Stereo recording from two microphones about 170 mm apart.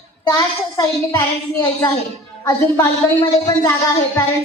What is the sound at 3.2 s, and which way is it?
Speech, 20° left (ahead or behind).